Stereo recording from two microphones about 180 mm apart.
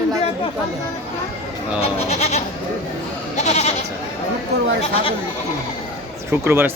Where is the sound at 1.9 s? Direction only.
35° left (ahead or behind).